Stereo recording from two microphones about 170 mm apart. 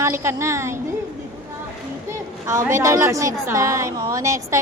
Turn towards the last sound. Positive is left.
turn(degrees=-20)  # may be behind; listen again after turning